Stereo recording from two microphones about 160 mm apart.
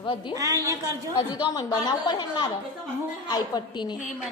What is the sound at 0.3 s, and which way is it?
Speech, 20° right (ahead or behind).